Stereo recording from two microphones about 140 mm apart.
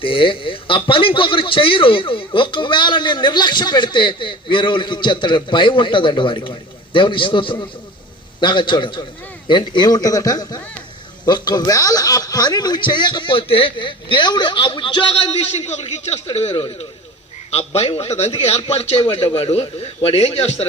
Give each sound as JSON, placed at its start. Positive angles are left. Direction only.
{"t": 0.0, "sound": "a man's voice", "side_deg": 40}
{"t": 15.5, "sound": "a man's voice", "side_deg": 50}